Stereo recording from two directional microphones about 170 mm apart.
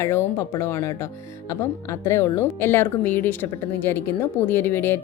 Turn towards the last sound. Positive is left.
turn(degrees=10)  # may be behind; listen again after turning